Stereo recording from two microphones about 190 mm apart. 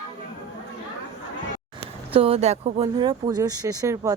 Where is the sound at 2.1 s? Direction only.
30° right (ahead or behind).